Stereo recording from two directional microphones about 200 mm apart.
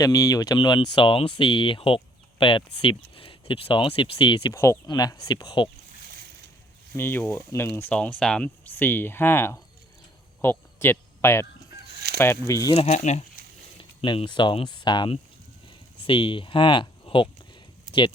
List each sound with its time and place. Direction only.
0.0 s speech: 15° left (ahead or behind)
6.9 s speech: 10° left (ahead or behind)
12.7 s speech: 30° left (ahead or behind)
13.7 s speech: 25° left (ahead or behind)
16.0 s a sound: 25° left (ahead or behind)